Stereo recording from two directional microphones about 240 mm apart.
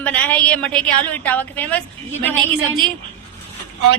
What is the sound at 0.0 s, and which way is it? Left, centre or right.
A woman's voice, centre.